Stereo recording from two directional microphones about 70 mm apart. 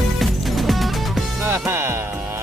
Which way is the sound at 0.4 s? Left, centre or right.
Centre.